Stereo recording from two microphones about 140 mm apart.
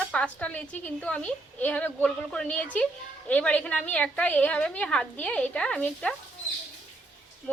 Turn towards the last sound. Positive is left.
turn(degrees=5)  # may be behind; listen again after turning